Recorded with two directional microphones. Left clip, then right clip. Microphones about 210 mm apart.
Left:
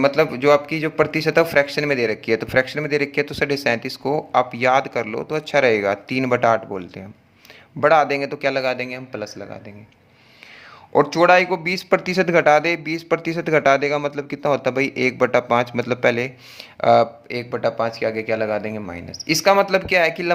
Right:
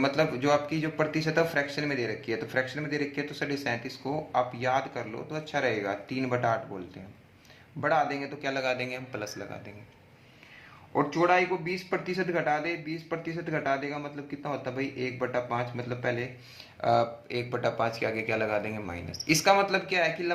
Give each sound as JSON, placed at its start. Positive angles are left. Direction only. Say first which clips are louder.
{"t": 0.0, "sound": "a man's voice", "louder": "left 10 dB", "side_deg": 40}
{"t": 10.9, "sound": "a man's voice", "louder": "left 11 dB", "side_deg": 55}